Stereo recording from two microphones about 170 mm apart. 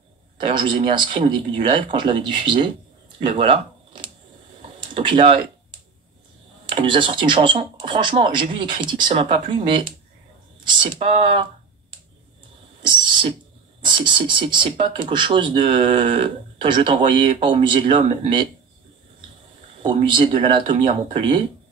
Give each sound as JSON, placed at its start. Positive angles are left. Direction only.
{"t": 0.4, "sound": "speech", "side_deg": -30}
{"t": 3.2, "sound": "a sound", "side_deg": -30}
{"t": 6.6, "sound": "speech", "side_deg": -30}
{"t": 12.8, "sound": "a sound", "side_deg": -30}
{"t": 13.8, "sound": "speech", "side_deg": -30}
{"t": 19.8, "sound": "speech", "side_deg": -30}